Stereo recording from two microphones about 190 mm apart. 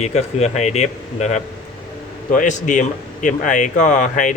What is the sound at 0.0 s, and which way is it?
Speech, 35° left (ahead or behind).